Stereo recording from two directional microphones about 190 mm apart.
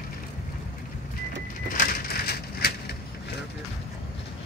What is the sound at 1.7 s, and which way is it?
Bird, 55° left (ahead or behind).